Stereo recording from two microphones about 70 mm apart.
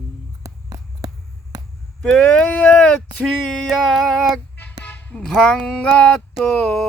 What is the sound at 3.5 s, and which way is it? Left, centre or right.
Music, centre.